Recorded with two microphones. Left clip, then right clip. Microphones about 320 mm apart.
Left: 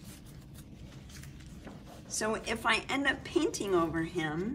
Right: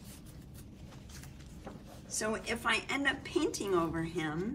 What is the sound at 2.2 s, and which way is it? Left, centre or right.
A woman's voice, centre.